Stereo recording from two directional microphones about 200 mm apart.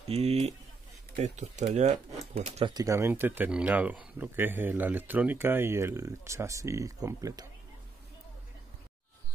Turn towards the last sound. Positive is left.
turn(degrees=-15)  # may be behind; listen again after turning